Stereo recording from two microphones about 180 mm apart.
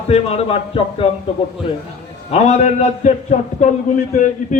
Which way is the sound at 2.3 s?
40° left (ahead or behind).